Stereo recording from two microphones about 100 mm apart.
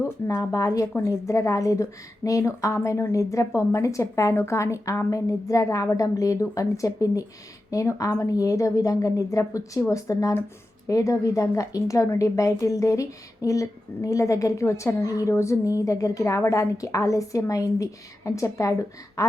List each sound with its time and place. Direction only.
0.0 s a woman's voice: 30° left (ahead or behind)